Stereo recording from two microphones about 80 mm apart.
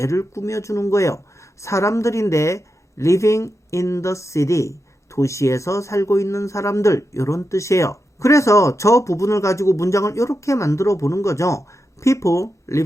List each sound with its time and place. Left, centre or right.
0.0 s speech: left